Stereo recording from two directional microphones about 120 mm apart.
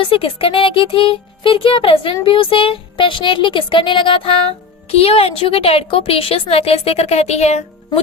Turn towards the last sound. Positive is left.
turn(degrees=65)  # may be behind; listen again after turning